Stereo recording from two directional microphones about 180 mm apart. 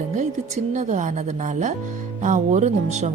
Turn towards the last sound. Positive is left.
turn(degrees=-40)  # may be behind; listen again after turning